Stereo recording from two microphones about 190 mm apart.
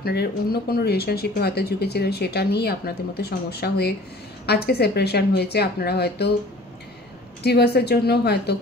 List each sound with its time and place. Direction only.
0.0 s speech: 55° left (ahead or behind)
7.4 s speech: 60° left (ahead or behind)